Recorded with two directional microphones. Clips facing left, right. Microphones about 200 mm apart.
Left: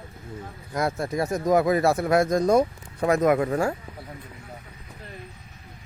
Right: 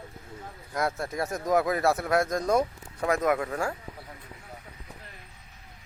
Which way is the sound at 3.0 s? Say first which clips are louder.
Left 5 dB; 15° left (ahead or behind).